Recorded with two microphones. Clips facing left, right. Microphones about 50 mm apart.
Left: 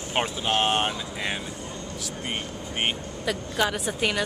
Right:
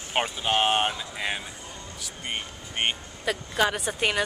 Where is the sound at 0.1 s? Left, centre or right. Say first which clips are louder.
Even; centre.